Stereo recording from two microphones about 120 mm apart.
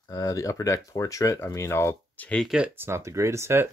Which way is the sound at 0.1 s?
30° left (ahead or behind).